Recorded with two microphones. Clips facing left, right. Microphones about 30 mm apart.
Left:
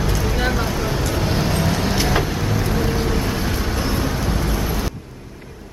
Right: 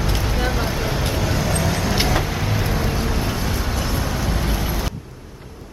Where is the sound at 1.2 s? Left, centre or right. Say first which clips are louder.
Left 1 dB; left.